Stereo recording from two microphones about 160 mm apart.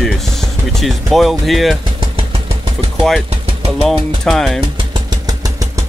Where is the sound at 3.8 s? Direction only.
Centre (ahead or behind).